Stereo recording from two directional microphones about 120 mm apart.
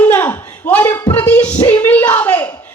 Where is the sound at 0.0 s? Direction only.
15° left (ahead or behind).